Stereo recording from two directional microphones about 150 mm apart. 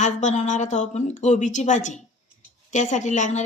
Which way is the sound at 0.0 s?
55° left (ahead or behind).